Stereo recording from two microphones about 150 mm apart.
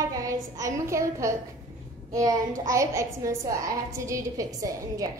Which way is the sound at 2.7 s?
20° right (ahead or behind).